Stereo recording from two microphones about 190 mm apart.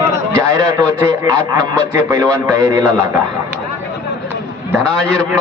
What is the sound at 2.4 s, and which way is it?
Speech, 20° right (ahead or behind).